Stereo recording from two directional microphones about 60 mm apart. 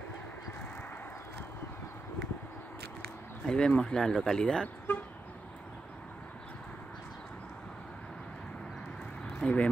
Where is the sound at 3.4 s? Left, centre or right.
Centre.